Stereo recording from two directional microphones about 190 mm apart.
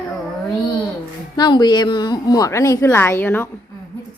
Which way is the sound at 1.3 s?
20° left (ahead or behind).